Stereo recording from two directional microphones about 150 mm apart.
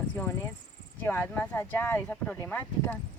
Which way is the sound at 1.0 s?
15° left (ahead or behind).